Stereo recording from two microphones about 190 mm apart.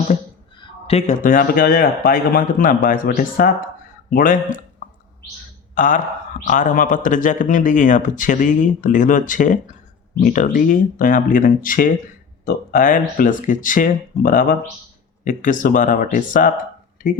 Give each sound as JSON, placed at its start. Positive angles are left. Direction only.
{"t": 0.6, "sound": "a man's voice", "side_deg": 35}
{"t": 4.8, "sound": "bird", "side_deg": 45}
{"t": 5.7, "sound": "a man's voice", "side_deg": 45}